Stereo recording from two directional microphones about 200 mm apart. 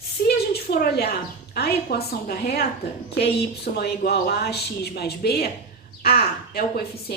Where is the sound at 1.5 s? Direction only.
50° left (ahead or behind).